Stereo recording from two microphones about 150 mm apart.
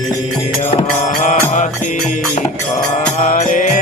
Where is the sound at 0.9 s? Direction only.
55° left (ahead or behind).